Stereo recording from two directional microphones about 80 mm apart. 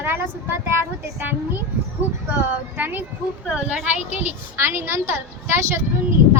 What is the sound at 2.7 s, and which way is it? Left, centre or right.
A woman's voice, right.